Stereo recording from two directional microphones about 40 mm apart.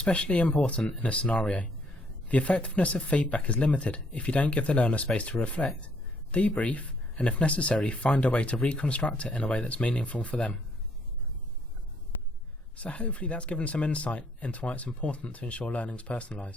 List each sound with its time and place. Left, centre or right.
0.0 s speech: left
12.7 s speech: left